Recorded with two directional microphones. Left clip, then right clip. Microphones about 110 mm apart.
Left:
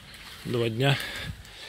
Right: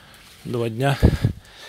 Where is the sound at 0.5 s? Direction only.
50° right (ahead or behind).